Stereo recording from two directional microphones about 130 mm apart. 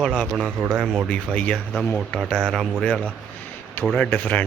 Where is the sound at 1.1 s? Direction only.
10° left (ahead or behind).